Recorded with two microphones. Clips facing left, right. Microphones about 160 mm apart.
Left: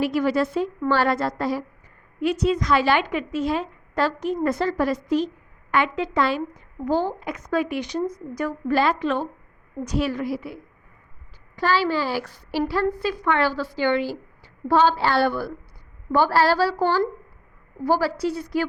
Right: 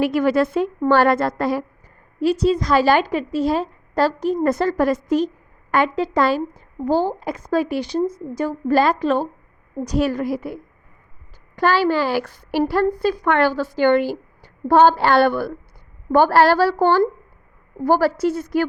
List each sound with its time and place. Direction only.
0.0 s a woman's voice: 55° right (ahead or behind)
2.2 s a woman's voice: 35° right (ahead or behind); by 16.8 s 55° right (ahead or behind)
17.8 s a woman's voice: 50° right (ahead or behind)